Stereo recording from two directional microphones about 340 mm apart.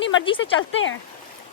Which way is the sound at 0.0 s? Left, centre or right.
Left.